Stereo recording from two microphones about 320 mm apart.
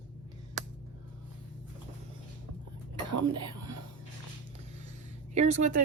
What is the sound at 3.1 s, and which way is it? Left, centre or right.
Whispering, right.